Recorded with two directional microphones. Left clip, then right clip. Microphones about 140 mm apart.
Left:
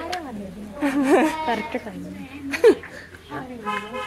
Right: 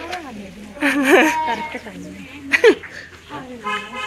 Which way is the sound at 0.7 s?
5° left (ahead or behind).